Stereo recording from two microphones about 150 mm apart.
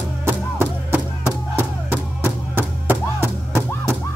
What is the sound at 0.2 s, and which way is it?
Music, 15° right (ahead or behind).